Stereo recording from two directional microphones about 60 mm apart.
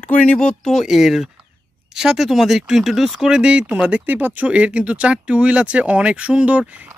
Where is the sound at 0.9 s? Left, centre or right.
Centre.